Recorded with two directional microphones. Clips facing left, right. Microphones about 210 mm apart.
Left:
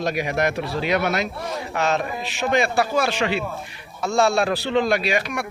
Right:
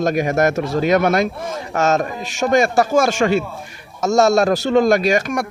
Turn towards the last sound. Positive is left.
turn(degrees=-45)  # may be behind; listen again after turning